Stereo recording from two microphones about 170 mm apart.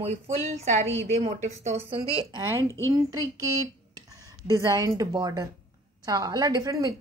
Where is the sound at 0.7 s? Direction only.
40° right (ahead or behind).